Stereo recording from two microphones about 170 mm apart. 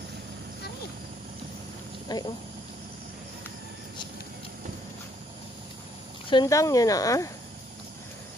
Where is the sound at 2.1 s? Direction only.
25° left (ahead or behind).